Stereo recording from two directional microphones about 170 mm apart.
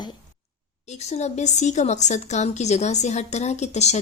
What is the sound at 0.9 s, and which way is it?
Speech, 40° left (ahead or behind).